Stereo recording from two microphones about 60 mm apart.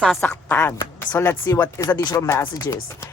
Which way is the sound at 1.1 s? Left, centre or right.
Left.